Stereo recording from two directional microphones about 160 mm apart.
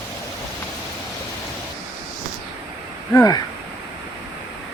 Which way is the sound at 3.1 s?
20° left (ahead or behind).